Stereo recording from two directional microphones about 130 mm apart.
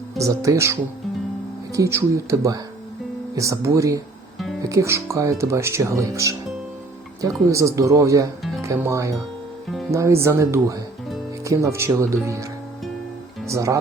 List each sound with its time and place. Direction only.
0.2 s speech: 25° right (ahead or behind)
13.5 s speech: 25° right (ahead or behind)